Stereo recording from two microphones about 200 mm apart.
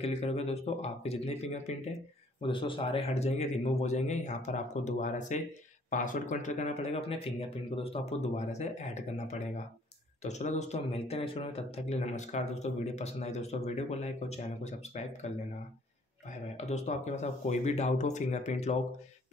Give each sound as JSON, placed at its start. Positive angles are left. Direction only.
{"t": 0.0, "sound": "speech", "side_deg": 30}